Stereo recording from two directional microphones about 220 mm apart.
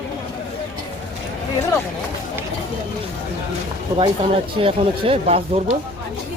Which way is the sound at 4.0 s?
25° right (ahead or behind).